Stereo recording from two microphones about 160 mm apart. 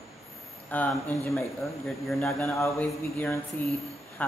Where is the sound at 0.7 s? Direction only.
10° left (ahead or behind).